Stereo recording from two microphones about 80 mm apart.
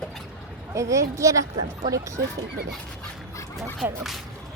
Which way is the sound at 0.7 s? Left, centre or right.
Right.